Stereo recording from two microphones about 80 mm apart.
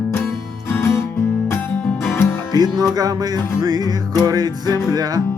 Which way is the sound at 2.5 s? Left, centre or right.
Right.